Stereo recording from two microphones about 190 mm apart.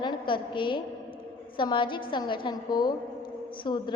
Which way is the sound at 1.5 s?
25° left (ahead or behind).